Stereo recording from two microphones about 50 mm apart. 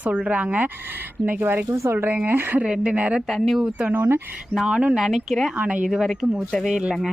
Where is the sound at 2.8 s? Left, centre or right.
Right.